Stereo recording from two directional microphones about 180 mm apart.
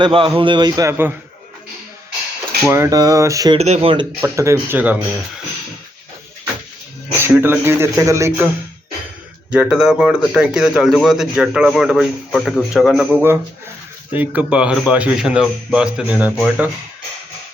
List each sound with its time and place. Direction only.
0.0 s a man's voice: 25° right (ahead or behind)
2.6 s a man's voice: 15° right (ahead or behind)
3.6 s speech: 35° right (ahead or behind)
4.2 s speech: 15° right (ahead or behind)
7.2 s speech: 10° right (ahead or behind)
9.5 s speech: 5° right (ahead or behind)
14.1 s speech: 10° right (ahead or behind)